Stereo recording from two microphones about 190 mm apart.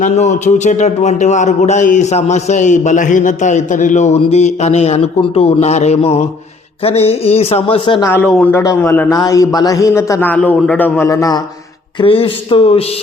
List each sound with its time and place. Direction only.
0.0 s a man's voice: 35° left (ahead or behind)
8.0 s a man's voice: 10° left (ahead or behind)
11.9 s speech: 30° left (ahead or behind)